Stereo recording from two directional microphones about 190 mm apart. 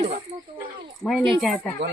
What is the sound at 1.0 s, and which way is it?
Speech, 5° left (ahead or behind).